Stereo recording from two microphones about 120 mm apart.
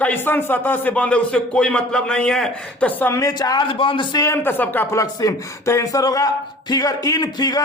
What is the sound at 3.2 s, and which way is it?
Speech, 30° left (ahead or behind).